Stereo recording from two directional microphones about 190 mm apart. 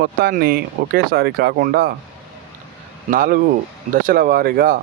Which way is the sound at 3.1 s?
45° right (ahead or behind).